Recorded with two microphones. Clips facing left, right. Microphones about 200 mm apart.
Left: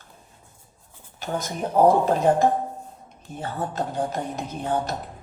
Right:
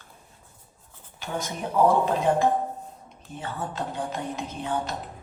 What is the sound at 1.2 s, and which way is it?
Speech, 40° left (ahead or behind).